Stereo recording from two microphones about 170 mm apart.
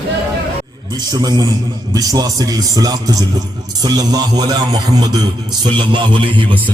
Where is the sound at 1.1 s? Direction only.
20° right (ahead or behind).